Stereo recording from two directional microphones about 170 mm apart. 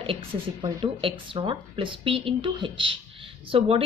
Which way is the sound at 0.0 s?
30° right (ahead or behind).